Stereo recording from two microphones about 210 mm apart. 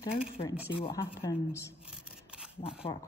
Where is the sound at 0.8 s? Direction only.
25° left (ahead or behind).